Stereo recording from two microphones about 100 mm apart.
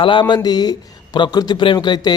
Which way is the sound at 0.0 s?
55° left (ahead or behind).